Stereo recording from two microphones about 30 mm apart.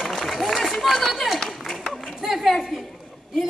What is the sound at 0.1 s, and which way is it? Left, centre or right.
Run, centre.